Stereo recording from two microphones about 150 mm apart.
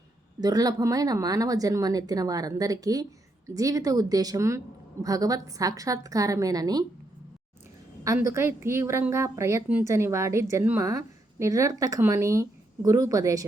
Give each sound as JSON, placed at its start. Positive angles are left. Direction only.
{"t": 0.3, "sound": "a woman's voice", "side_deg": -25}
{"t": 8.0, "sound": "a woman's voice", "side_deg": -20}